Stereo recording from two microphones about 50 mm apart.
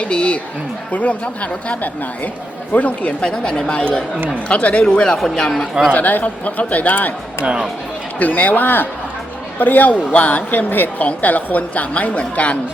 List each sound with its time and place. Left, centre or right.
0.0 s a woman's voice: left
3.2 s speech: centre
5.9 s a woman's voice: left
7.4 s speech: centre
8.2 s a woman's voice: left